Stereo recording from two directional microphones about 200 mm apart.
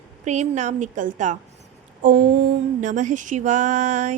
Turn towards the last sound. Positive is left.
turn(degrees=-35)  # may be behind; listen again after turning